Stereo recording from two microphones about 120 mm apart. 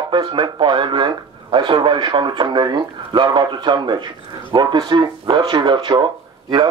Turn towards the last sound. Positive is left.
turn(degrees=-40)  # may be behind; listen again after turning